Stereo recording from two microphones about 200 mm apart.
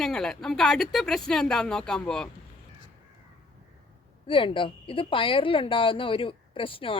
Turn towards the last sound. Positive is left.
turn(degrees=25)  # may be behind; listen again after turning